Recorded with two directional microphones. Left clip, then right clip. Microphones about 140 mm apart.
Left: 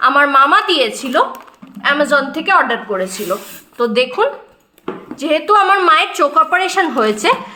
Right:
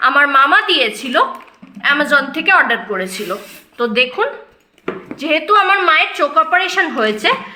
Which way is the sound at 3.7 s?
35° left (ahead or behind).